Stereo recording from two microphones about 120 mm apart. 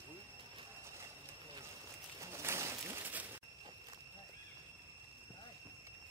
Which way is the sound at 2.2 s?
20° right (ahead or behind).